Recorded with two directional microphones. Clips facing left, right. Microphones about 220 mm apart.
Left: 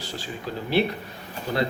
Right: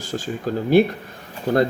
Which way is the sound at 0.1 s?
45° right (ahead or behind).